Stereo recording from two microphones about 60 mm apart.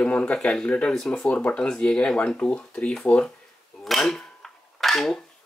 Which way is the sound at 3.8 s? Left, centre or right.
Centre.